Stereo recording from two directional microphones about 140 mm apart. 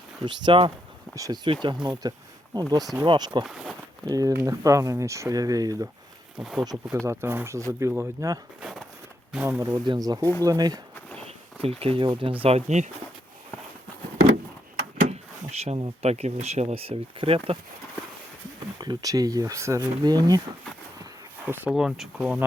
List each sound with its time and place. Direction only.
0.3 s speech: 35° right (ahead or behind)
1.1 s speech: 25° right (ahead or behind)
3.4 s speech: 5° right (ahead or behind)
4.0 s speech: 25° right (ahead or behind)
6.4 s speech: 5° right (ahead or behind)
7.0 s speech: 20° right (ahead or behind)
9.8 s speech: 30° right (ahead or behind)
11.6 s speech: 45° right (ahead or behind)
15.1 s drawer open or close: 50° right (ahead or behind)
16.0 s speech: 50° right (ahead or behind)
18.8 s speech: 25° right (ahead or behind)
21.4 s speech: 15° right (ahead or behind)
21.7 s speech: centre (ahead or behind)